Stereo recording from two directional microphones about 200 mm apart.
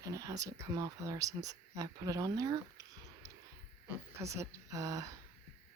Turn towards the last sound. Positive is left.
turn(degrees=-15)  # may be behind; listen again after turning